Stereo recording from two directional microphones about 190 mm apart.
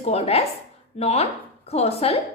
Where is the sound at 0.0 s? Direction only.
35° left (ahead or behind).